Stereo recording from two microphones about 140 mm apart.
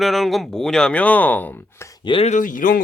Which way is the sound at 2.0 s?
40° left (ahead or behind).